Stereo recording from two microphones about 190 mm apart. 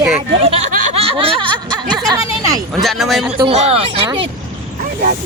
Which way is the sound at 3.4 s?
35° right (ahead or behind).